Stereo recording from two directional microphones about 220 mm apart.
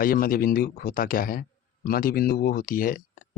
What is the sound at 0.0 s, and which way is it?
Speech, 40° left (ahead or behind).